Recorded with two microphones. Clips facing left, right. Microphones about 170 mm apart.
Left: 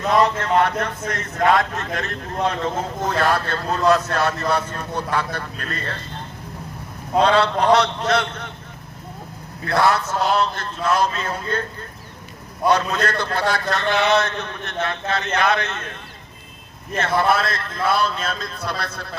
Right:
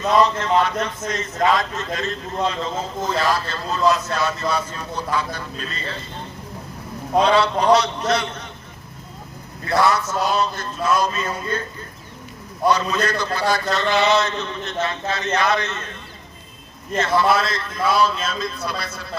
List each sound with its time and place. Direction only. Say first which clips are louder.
0.1 s a man's voice: even; 60° left (ahead or behind)
7.2 s a man's voice: even; 60° left (ahead or behind)
9.7 s a man's voice: even; 60° left (ahead or behind)
12.6 s a man's voice: even; 60° left (ahead or behind)
17.0 s a man's voice: right 1 dB; 55° left (ahead or behind)